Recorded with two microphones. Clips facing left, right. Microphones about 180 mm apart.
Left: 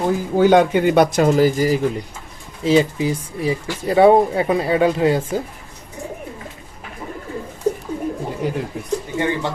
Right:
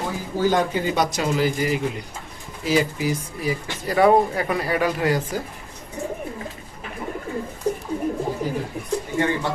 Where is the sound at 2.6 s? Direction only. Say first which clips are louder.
Left 5 dB; 25° left (ahead or behind).